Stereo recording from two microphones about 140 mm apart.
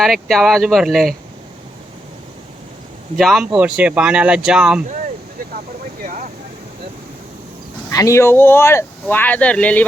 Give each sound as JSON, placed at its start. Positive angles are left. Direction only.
{"t": 0.0, "sound": "speech", "side_deg": 0}
{"t": 3.2, "sound": "speech", "side_deg": 0}
{"t": 7.9, "sound": "speech", "side_deg": 20}